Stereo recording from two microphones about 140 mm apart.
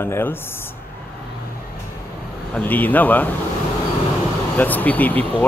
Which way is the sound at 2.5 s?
10° left (ahead or behind).